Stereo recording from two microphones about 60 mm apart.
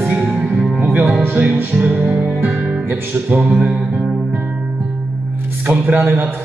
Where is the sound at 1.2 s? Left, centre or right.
Right.